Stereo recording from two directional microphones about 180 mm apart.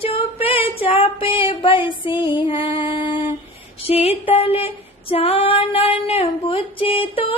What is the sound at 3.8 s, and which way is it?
Female singing, 35° left (ahead or behind).